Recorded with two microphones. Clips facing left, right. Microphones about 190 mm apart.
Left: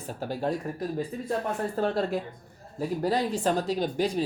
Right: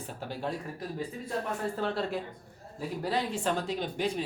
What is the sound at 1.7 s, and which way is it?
Speech, 40° left (ahead or behind).